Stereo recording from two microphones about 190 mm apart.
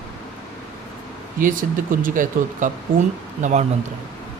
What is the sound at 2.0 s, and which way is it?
Speech, 45° right (ahead or behind).